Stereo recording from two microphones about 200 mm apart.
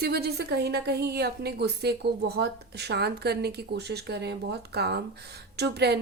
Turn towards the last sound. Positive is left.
turn(degrees=-55)  # may be behind; listen again after turning